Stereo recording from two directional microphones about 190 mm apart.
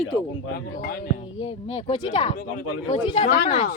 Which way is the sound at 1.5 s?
30° left (ahead or behind).